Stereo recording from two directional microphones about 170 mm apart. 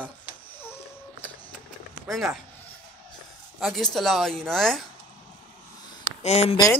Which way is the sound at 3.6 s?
Centre (ahead or behind).